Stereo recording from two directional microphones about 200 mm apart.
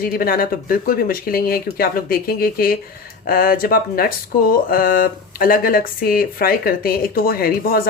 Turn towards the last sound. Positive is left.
turn(degrees=50)  # may be behind; listen again after turning